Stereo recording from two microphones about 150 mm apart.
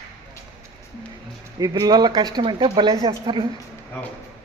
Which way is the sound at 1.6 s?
25° right (ahead or behind).